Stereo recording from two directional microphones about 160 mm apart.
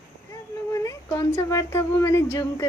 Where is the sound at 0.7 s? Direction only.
20° left (ahead or behind).